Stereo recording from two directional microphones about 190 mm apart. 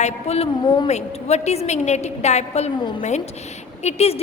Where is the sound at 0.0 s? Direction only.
30° left (ahead or behind).